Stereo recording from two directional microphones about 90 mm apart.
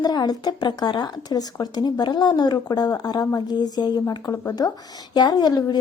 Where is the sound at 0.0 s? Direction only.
50° left (ahead or behind).